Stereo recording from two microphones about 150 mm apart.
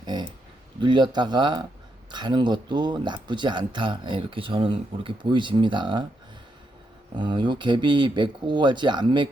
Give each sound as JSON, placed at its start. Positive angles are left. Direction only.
{"t": 0.0, "sound": "a sound", "side_deg": -30}
{"t": 0.8, "sound": "speech", "side_deg": -30}
{"t": 7.2, "sound": "speech", "side_deg": -30}